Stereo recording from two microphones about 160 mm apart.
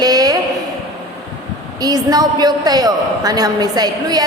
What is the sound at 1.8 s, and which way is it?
A woman's voice, 25° right (ahead or behind).